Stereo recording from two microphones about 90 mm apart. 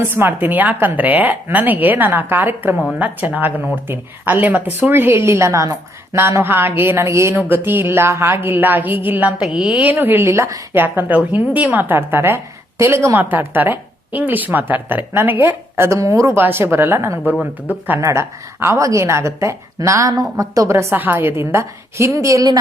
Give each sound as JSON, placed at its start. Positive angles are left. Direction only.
{"t": 0.0, "sound": "speech", "side_deg": -25}
{"t": 9.4, "sound": "speech", "side_deg": -10}
{"t": 10.8, "sound": "a woman's voice", "side_deg": -20}
{"t": 18.0, "sound": "a woman's voice", "side_deg": -30}
{"t": 20.9, "sound": "speech", "side_deg": -20}